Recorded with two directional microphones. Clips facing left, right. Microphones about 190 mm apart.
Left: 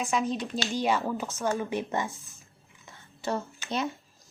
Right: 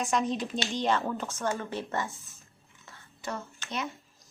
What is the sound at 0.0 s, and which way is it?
A woman's voice, centre (ahead or behind).